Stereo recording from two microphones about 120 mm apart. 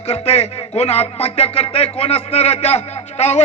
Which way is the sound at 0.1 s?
60° left (ahead or behind).